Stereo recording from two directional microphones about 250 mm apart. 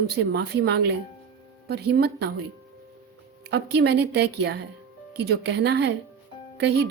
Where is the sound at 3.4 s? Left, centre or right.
Right.